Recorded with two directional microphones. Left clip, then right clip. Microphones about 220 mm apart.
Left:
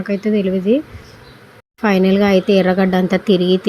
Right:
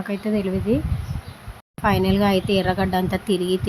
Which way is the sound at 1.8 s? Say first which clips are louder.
Left 5 dB; 15° left (ahead or behind).